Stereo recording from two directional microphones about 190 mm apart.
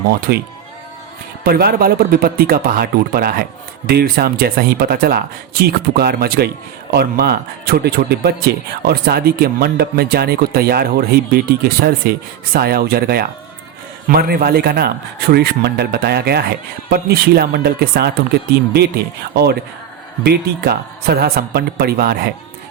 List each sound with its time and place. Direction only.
0.3 s speech: 55° right (ahead or behind)
1.5 s speech: 50° right (ahead or behind)